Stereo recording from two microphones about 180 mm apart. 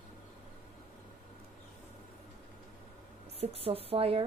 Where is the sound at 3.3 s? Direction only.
30° right (ahead or behind).